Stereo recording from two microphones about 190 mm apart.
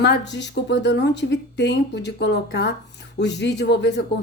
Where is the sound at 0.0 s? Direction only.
65° left (ahead or behind).